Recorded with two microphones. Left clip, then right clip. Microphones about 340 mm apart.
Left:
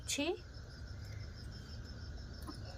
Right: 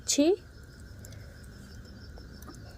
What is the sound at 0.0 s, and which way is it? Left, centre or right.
Speech, centre.